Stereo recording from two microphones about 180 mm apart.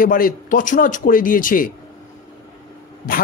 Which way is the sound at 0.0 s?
50° left (ahead or behind).